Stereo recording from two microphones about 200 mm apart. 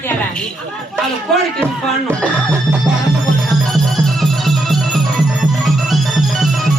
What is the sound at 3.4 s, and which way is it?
Music, centre (ahead or behind).